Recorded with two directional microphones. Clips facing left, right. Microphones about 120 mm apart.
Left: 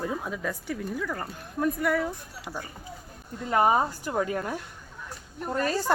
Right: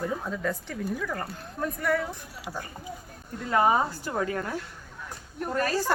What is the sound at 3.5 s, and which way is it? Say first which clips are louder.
A woman's voice: even; 25° left (ahead or behind).